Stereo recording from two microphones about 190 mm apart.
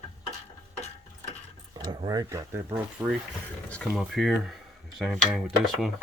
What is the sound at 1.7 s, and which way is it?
Speech, 25° right (ahead or behind).